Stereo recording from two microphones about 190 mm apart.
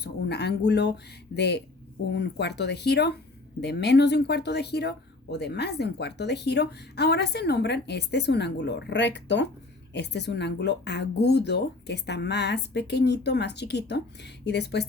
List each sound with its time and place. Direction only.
0.0 s speech: 60° left (ahead or behind)